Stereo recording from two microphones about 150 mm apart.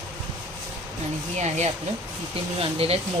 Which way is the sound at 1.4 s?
50° right (ahead or behind).